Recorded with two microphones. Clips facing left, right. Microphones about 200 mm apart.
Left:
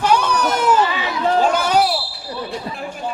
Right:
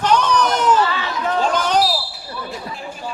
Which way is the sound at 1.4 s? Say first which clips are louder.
Even; 10° left (ahead or behind).